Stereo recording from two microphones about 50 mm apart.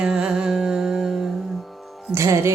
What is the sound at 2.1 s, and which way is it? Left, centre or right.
Speech, right.